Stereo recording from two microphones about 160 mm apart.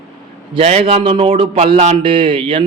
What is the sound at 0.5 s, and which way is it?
Speech, 40° right (ahead or behind).